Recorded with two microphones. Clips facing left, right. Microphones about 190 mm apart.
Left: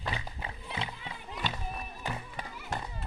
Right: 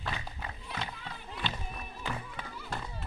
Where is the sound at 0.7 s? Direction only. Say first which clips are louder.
Left 1 dB; 15° left (ahead or behind).